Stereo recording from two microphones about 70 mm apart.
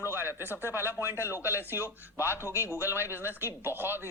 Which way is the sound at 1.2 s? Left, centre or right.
Left.